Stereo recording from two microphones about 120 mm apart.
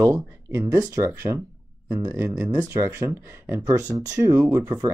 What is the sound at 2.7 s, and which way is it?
Speech, 25° right (ahead or behind).